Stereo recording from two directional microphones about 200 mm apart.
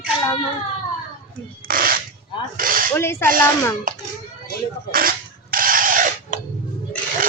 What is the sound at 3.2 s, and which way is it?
Speech, 45° right (ahead or behind).